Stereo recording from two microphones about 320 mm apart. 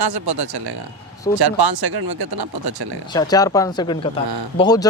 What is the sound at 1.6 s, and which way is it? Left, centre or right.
Speech, right.